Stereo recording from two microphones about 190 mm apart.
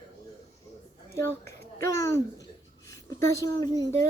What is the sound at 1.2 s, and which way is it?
Speech, 15° left (ahead or behind).